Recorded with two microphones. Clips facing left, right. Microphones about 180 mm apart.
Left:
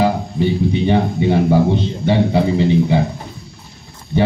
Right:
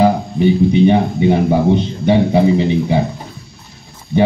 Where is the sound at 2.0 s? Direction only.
15° right (ahead or behind).